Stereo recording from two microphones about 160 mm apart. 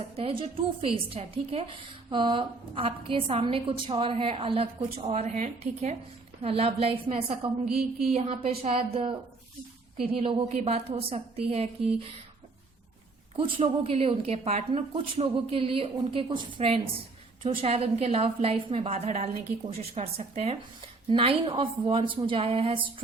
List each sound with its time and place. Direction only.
0.2 s a woman's voice: 35° right (ahead or behind)
7.7 s a sound: 5° right (ahead or behind)
8.1 s a woman's voice: 40° right (ahead or behind)
13.3 s a woman's voice: 35° right (ahead or behind)